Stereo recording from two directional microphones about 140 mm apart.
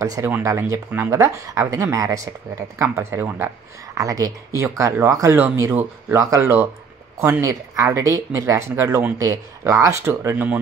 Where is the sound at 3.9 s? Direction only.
25° right (ahead or behind).